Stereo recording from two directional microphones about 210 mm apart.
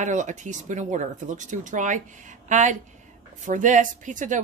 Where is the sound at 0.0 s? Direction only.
35° right (ahead or behind).